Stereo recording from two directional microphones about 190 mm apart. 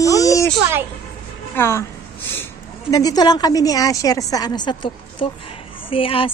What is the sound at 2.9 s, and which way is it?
A woman's voice, 20° left (ahead or behind).